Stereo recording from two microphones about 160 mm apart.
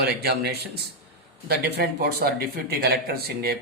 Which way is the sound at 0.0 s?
85° right.